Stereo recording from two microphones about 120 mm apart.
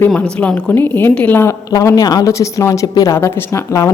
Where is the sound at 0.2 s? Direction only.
10° left (ahead or behind).